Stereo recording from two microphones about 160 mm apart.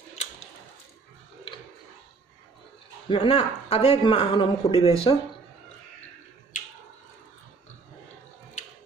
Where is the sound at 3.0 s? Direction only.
40° left (ahead or behind).